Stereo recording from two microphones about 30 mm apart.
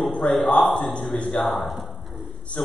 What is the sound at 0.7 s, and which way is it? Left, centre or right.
Speech, left.